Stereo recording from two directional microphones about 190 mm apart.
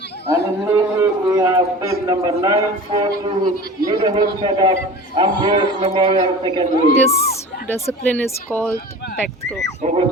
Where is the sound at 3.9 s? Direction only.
20° right (ahead or behind).